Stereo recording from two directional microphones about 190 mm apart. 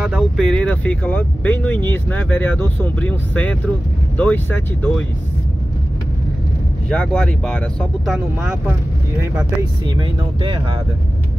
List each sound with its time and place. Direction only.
0.0 s speech: centre (ahead or behind)
6.9 s speech: 5° left (ahead or behind)
9.2 s speech: 15° right (ahead or behind)
9.9 s speech: 25° right (ahead or behind)